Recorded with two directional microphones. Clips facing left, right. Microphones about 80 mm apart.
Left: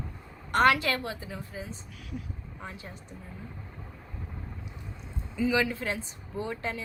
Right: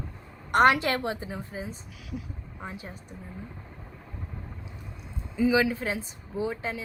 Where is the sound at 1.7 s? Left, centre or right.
Centre.